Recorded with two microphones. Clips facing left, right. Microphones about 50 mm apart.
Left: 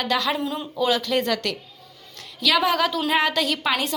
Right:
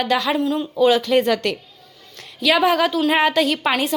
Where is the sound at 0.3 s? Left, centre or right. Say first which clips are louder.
Right 7 dB; centre.